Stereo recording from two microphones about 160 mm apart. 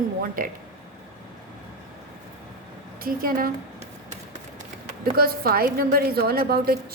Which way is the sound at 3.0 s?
65° right (ahead or behind).